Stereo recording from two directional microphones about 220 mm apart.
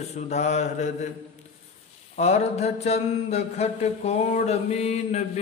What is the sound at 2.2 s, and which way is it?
Mantra, 30° left (ahead or behind).